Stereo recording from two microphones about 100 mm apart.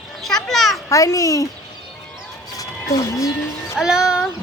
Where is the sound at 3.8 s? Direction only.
5° right (ahead or behind).